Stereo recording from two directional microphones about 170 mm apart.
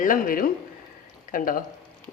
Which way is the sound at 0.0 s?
55° left (ahead or behind).